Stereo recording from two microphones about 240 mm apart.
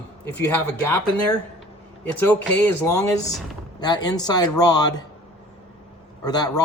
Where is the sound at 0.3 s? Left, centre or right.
Centre.